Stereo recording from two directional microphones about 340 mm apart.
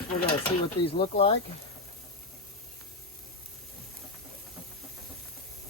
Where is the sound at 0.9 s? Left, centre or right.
Centre.